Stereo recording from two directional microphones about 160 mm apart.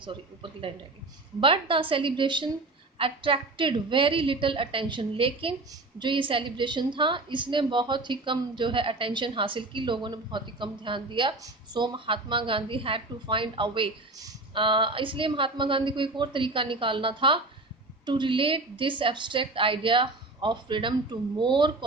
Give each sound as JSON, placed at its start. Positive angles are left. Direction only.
{"t": 0.0, "sound": "a woman's voice", "side_deg": -30}